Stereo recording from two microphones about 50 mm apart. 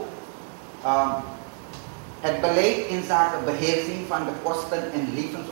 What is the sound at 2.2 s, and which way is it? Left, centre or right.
A woman's voice, centre.